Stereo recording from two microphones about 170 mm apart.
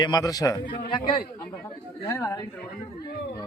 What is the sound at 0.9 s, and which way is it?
A man's voice, 30° left (ahead or behind).